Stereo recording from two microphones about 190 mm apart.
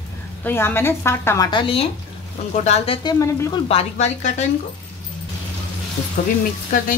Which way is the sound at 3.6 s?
35° left (ahead or behind).